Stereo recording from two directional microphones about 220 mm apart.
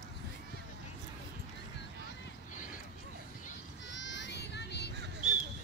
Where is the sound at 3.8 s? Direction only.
55° left (ahead or behind).